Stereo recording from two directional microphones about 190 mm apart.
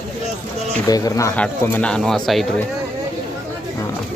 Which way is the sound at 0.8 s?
20° left (ahead or behind).